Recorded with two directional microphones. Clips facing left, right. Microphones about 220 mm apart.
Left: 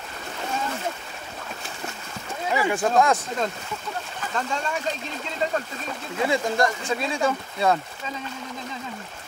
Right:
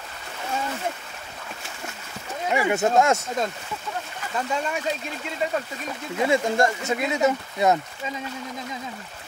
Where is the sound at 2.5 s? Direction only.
25° right (ahead or behind).